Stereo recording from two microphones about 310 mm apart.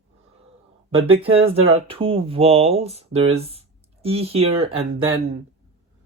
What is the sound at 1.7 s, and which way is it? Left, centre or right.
Speech, centre.